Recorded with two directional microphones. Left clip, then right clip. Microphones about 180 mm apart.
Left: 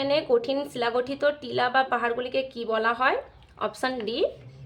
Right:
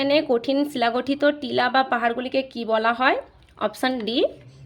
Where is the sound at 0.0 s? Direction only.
25° right (ahead or behind).